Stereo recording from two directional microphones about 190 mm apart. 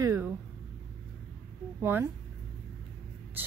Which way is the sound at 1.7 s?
10° right (ahead or behind).